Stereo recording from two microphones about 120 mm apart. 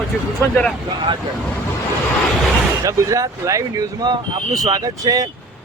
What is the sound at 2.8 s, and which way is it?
Speech, 25° right (ahead or behind).